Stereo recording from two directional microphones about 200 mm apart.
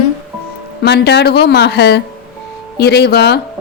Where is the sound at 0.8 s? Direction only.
55° left (ahead or behind).